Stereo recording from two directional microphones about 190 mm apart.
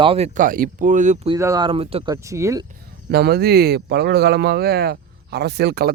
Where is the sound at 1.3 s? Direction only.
15° right (ahead or behind).